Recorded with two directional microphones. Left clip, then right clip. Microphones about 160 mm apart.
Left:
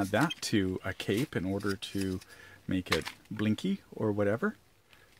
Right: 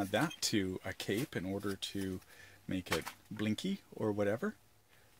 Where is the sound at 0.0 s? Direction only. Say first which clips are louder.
Left 5 dB; 30° left (ahead or behind).